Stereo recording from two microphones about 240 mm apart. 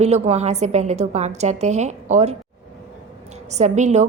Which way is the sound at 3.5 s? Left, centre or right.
Right.